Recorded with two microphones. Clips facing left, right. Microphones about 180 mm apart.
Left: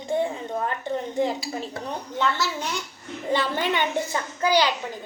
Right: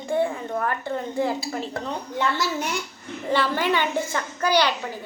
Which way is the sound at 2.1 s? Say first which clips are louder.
Right 1 dB; 10° right (ahead or behind).